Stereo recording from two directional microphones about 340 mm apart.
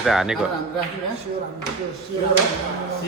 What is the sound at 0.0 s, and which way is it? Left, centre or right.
Speech, centre.